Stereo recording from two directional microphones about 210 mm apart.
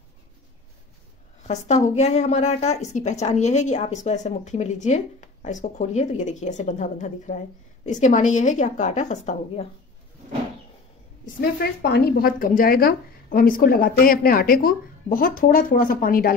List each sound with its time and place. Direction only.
1.5 s speech: 30° left (ahead or behind)
11.8 s a woman's voice: 50° left (ahead or behind)